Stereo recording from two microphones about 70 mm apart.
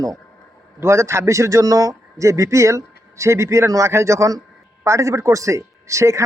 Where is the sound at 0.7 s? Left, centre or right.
Right.